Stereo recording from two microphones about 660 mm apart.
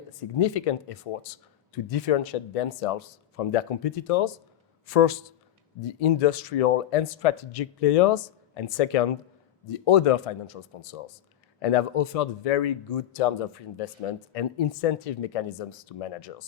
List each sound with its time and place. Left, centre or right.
0.3 s speech: left